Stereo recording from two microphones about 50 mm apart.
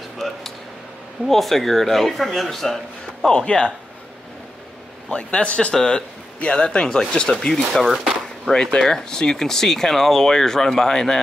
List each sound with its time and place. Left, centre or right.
0.2 s a sound: centre
1.2 s speech: centre
5.1 s speech: left
7.7 s speech: centre
8.5 s speech: centre